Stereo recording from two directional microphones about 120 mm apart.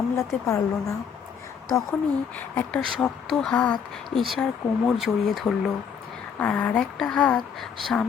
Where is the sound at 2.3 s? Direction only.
15° left (ahead or behind).